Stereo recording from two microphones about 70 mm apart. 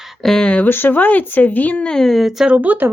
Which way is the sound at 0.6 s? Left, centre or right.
Left.